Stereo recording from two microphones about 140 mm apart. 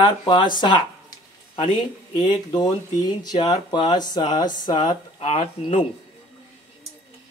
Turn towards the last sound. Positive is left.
turn(degrees=45)  # may be behind; listen again after turning